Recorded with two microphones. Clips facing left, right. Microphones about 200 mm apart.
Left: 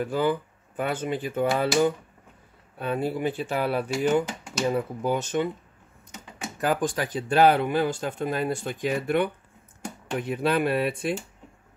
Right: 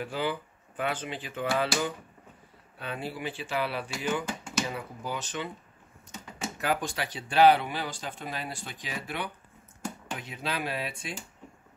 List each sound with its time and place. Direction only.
0.0 s speech: 50° left (ahead or behind)
6.6 s speech: 50° left (ahead or behind)